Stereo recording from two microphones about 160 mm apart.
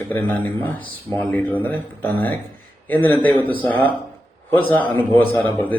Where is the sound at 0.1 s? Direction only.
10° left (ahead or behind).